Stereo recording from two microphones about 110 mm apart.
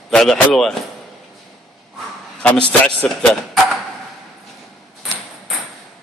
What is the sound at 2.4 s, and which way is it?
A man's voice, 10° left (ahead or behind).